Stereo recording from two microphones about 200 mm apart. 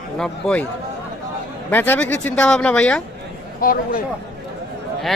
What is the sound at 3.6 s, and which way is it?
Speech, 45° left (ahead or behind).